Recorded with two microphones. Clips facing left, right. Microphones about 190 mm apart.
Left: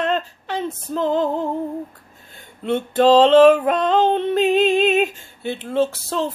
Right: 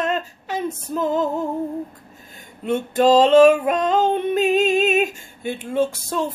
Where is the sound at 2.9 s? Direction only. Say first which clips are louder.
Left 1 dB; 10° right (ahead or behind).